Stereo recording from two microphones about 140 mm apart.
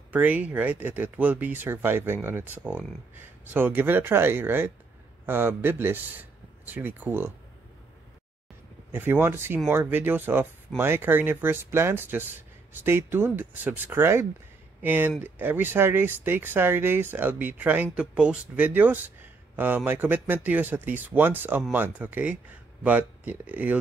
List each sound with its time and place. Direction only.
0.1 s a man's voice: 10° right (ahead or behind)
8.9 s speech: 15° right (ahead or behind)